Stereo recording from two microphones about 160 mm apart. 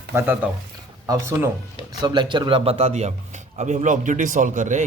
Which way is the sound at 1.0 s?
25° right (ahead or behind).